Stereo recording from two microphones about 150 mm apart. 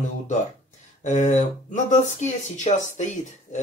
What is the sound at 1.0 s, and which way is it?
Speech, 50° left (ahead or behind).